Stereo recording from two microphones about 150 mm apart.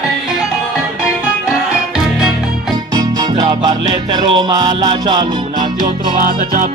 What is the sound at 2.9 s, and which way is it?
Music, 25° right (ahead or behind).